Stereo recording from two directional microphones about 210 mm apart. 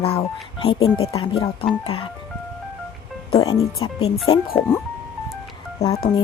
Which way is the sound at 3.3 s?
20° left (ahead or behind).